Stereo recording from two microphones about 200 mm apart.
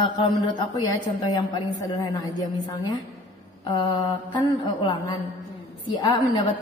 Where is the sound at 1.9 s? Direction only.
20° left (ahead or behind).